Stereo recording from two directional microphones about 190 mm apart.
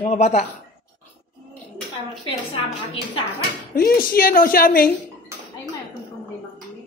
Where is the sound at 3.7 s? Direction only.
50° left (ahead or behind).